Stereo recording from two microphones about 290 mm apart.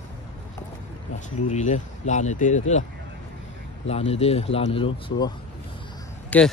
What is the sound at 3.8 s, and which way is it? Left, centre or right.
Speech, left.